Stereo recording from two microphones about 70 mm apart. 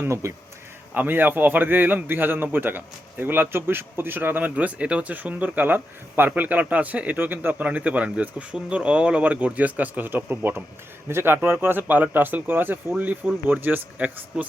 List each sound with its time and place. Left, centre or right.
0.0 s speech: right
0.9 s a man's voice: right